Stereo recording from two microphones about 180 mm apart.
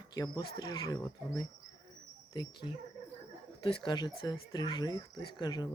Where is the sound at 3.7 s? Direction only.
25° left (ahead or behind).